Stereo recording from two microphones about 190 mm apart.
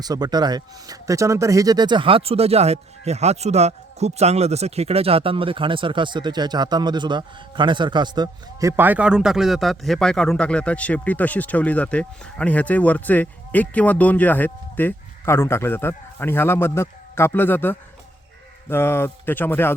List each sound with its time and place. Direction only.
0.0 s speech: 20° right (ahead or behind)
8.7 s a man's voice: 10° right (ahead or behind); by 19.7 s 10° left (ahead or behind)